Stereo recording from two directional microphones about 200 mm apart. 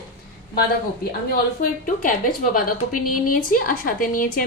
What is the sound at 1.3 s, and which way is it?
A woman's voice, 45° left (ahead or behind).